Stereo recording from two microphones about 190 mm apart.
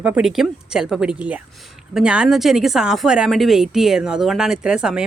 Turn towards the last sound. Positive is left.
turn(degrees=-5)  # may be behind; listen again after turning